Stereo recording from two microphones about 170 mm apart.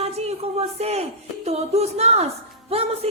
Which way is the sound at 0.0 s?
40° right (ahead or behind).